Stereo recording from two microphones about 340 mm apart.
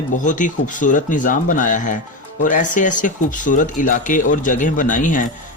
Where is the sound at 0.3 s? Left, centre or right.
Left.